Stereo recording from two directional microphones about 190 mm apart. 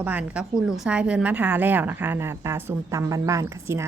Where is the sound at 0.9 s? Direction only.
5° right (ahead or behind).